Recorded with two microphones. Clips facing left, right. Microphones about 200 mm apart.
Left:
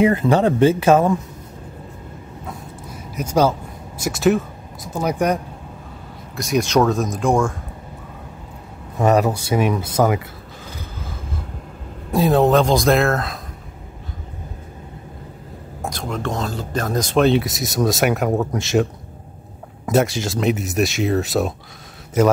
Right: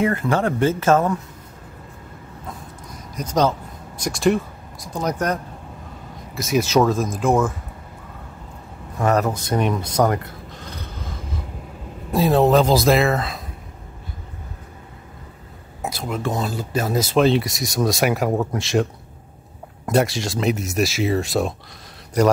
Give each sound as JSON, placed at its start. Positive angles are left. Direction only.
{"t": 0.0, "sound": "speech", "side_deg": 20}
{"t": 2.4, "sound": "a sound", "side_deg": 5}
{"t": 4.0, "sound": "speech", "side_deg": 5}
{"t": 6.3, "sound": "speech", "side_deg": 0}
{"t": 8.9, "sound": "a sound", "side_deg": 15}
{"t": 12.1, "sound": "speech", "side_deg": 0}
{"t": 15.8, "sound": "speech", "side_deg": -5}
{"t": 19.9, "sound": "speech", "side_deg": 0}